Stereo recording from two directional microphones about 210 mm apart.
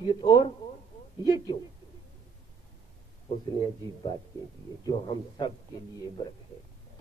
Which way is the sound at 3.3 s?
25° left (ahead or behind).